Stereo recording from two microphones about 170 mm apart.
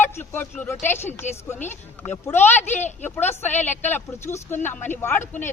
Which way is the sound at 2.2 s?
10° left (ahead or behind).